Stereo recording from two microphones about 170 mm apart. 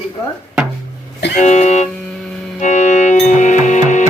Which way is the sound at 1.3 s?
45° left (ahead or behind).